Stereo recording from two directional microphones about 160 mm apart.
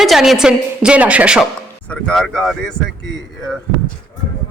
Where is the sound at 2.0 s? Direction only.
5° left (ahead or behind).